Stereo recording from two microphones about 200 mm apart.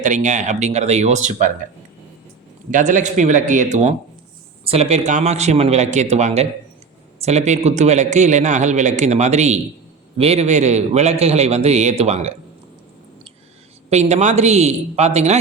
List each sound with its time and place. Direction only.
0.0 s a man's voice: 40° right (ahead or behind)
2.6 s a man's voice: 40° right (ahead or behind)
13.9 s a man's voice: 35° right (ahead or behind)